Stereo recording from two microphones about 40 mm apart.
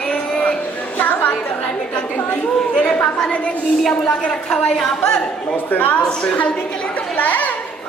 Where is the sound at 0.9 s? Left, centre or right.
Left.